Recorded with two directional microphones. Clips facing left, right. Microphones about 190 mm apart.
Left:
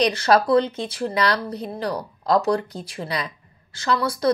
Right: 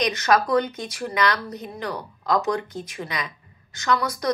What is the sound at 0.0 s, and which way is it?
A woman's voice, 30° left (ahead or behind).